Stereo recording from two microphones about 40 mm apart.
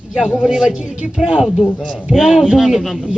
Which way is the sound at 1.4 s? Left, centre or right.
Centre.